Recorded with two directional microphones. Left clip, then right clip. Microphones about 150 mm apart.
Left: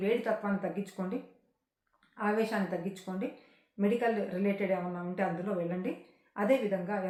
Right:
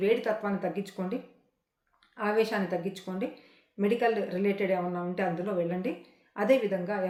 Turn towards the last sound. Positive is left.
turn(degrees=-50)  # may be behind; listen again after turning